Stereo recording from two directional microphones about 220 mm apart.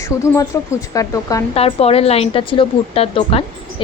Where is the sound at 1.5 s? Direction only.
25° left (ahead or behind).